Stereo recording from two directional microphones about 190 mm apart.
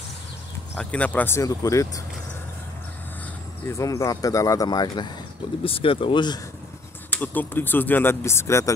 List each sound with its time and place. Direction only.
0.7 s speech: 5° left (ahead or behind)
3.6 s speech: 15° left (ahead or behind)
7.1 s speech: 10° left (ahead or behind)